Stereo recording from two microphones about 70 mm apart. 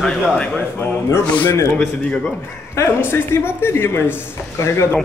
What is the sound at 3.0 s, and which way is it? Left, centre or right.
A man's voice, left.